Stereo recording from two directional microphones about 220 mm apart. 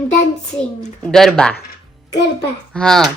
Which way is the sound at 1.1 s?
5° left (ahead or behind).